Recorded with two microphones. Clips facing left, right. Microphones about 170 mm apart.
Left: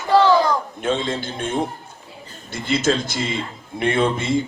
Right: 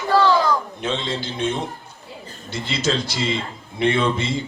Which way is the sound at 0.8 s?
50° left (ahead or behind).